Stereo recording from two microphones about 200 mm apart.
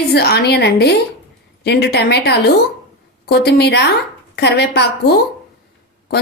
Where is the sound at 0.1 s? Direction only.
55° left (ahead or behind).